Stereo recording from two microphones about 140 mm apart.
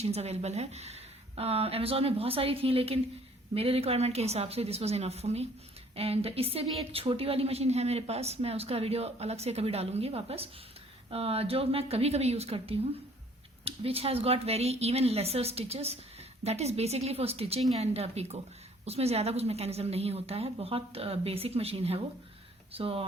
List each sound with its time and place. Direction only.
0.0 s a woman's voice: 50° right (ahead or behind)